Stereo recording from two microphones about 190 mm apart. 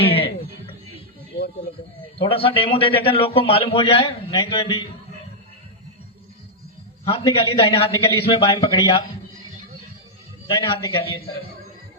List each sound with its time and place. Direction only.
0.0 s music: 30° left (ahead or behind)
2.1 s a man's voice: 30° left (ahead or behind)
7.0 s a man's voice: 25° left (ahead or behind)
10.4 s a man's voice: 25° left (ahead or behind)